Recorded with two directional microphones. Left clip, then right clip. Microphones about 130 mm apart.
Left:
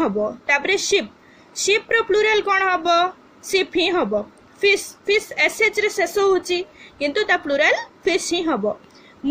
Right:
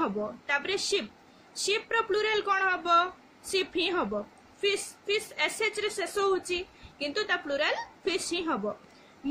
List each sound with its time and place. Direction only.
0.0 s speech: 30° left (ahead or behind)